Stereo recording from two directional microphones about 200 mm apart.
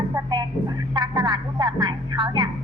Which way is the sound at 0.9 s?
20° right (ahead or behind).